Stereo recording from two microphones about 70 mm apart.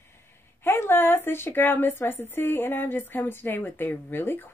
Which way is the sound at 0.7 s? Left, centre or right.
Left.